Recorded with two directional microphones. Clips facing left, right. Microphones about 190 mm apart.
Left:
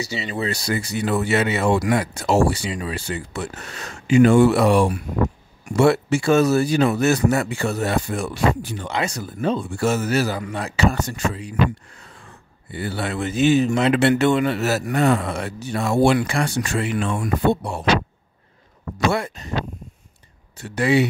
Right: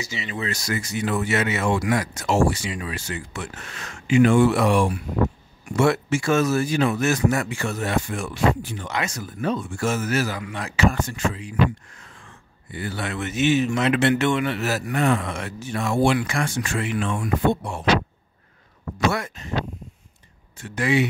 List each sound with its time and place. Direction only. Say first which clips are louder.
0.0 s speech: left 4 dB; 35° left (ahead or behind)
19.1 s speech: left 4 dB; 35° left (ahead or behind)
20.5 s speech: left 3 dB; 35° left (ahead or behind)